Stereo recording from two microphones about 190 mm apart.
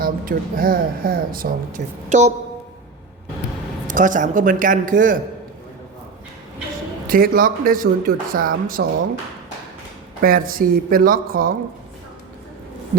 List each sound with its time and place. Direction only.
0.0 s speech: 50° right (ahead or behind)
2.0 s a woman's voice: 40° right (ahead or behind)
3.8 s speech: 45° right (ahead or behind)
7.1 s speech: 50° right (ahead or behind)
10.2 s speech: 50° right (ahead or behind)